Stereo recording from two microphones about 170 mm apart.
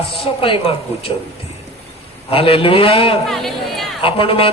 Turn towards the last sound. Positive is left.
turn(degrees=30)  # may be behind; listen again after turning